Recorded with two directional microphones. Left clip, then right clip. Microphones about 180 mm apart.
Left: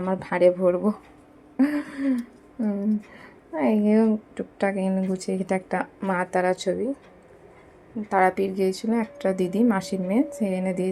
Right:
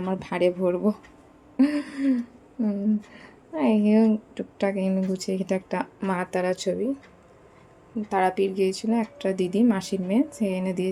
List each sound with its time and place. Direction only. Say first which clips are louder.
0.0 s a woman's voice: left 4 dB; 15° right (ahead or behind)
1.5 s a sound: even; 20° right (ahead or behind)
2.6 s a woman's voice: even; 10° right (ahead or behind)
8.1 s a woman's voice: left 2 dB; 5° right (ahead or behind)